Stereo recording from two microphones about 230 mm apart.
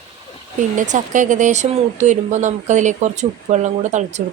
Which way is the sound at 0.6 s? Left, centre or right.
Right.